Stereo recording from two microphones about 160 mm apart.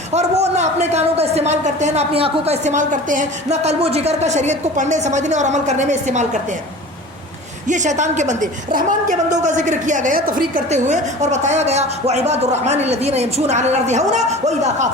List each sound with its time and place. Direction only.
0.1 s a man's voice: 45° right (ahead or behind)
7.7 s a man's voice: 50° right (ahead or behind)
10.7 s a man's voice: 45° right (ahead or behind)